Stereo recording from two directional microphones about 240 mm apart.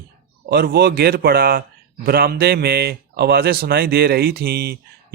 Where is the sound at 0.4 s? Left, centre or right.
Right.